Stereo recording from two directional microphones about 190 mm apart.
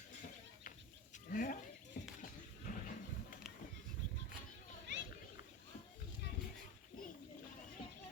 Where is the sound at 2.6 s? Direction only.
45° left (ahead or behind).